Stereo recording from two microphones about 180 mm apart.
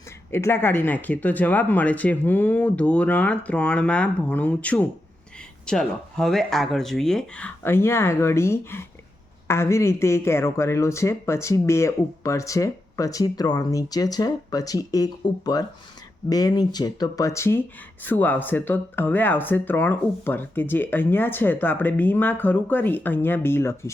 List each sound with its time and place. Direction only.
0.3 s speech: 15° left (ahead or behind)